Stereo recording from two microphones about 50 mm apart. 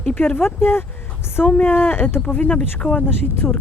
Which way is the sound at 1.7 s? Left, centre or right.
Left.